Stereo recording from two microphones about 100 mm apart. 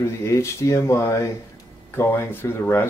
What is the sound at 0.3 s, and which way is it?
Speech, 30° left (ahead or behind).